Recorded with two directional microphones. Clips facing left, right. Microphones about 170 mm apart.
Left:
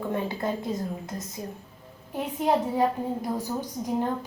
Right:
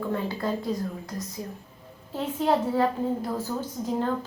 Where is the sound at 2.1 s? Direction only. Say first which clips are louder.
Even; 15° left (ahead or behind).